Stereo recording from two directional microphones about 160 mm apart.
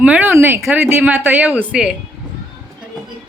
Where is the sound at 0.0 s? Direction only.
10° right (ahead or behind).